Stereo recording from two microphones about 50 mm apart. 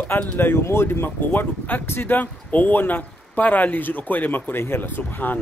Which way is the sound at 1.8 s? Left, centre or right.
Left.